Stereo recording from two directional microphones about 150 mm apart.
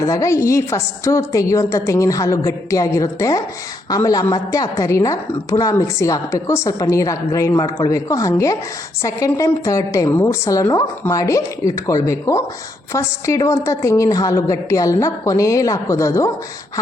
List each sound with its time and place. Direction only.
0.0 s a woman's voice: 20° left (ahead or behind)